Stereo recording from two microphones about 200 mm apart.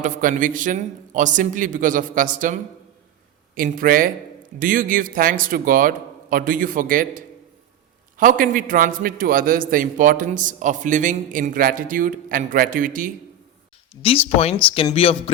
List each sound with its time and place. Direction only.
0.0 s a man's voice: 40° right (ahead or behind)
13.9 s speech: 30° left (ahead or behind)